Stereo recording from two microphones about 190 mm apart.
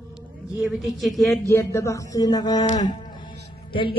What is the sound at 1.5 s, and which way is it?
Speech, 15° left (ahead or behind).